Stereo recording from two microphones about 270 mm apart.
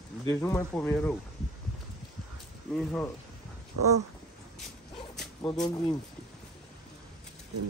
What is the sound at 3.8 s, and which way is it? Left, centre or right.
Speech, right.